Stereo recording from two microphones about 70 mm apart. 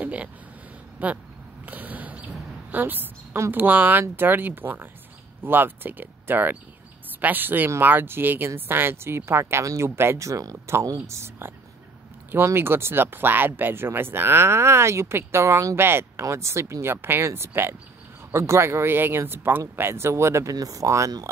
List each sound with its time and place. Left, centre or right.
0.0 s a sound: centre
0.9 s speech: right
1.7 s a sound: right
3.3 s speech: right
3.6 s speech: right
20.5 s speech: right